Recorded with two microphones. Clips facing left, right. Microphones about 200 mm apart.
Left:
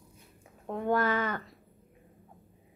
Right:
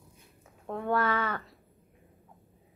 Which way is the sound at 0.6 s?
15° left (ahead or behind).